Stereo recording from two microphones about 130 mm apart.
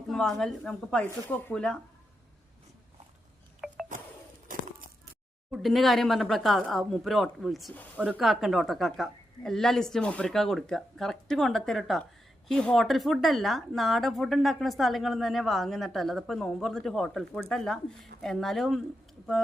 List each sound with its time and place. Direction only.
0.1 s speech: 5° left (ahead or behind)
3.6 s music: 5° right (ahead or behind)
4.5 s a sound: 90° right
5.5 s speech: centre (ahead or behind)
7.7 s speech: 10° left (ahead or behind)
8.2 s speech: centre (ahead or behind)